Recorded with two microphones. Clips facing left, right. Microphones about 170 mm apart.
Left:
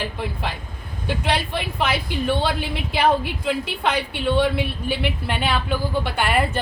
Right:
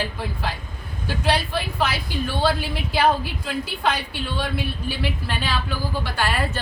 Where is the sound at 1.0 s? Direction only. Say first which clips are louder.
Even; 20° left (ahead or behind).